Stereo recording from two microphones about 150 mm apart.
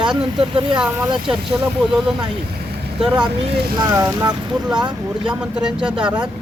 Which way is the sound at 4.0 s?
20° right (ahead or behind).